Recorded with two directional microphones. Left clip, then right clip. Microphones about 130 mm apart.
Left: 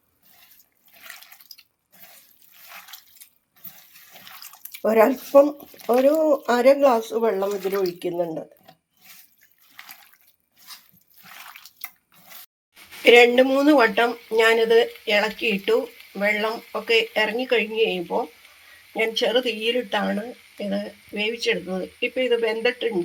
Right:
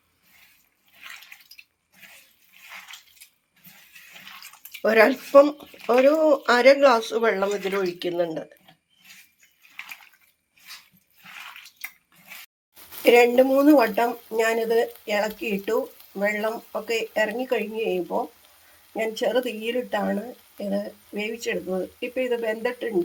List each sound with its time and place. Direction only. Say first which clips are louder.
4.9 s speech: even; 15° left (ahead or behind)
5.8 s speech: even; 10° right (ahead or behind)
6.1 s speech: right 1 dB; 10° left (ahead or behind)
13.0 s speech: left 3 dB; centre (ahead or behind)
19.1 s speech: left 2 dB; centre (ahead or behind)